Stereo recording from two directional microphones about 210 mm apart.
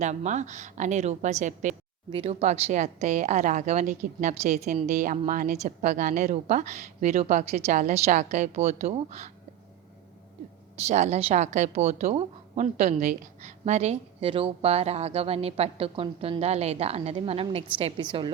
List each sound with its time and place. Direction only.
0.0 s a woman's voice: 35° right (ahead or behind)
10.8 s a woman's voice: 30° right (ahead or behind)